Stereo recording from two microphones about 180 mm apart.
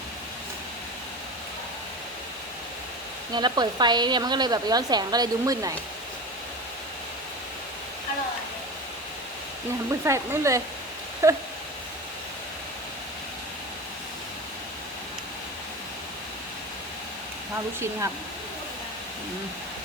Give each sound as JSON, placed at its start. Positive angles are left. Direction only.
{"t": 3.3, "sound": "a woman's voice", "side_deg": -25}
{"t": 10.0, "sound": "speech", "side_deg": -15}